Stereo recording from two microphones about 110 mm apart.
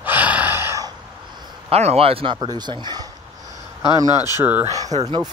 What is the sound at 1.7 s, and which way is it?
Speech, 70° right (ahead or behind).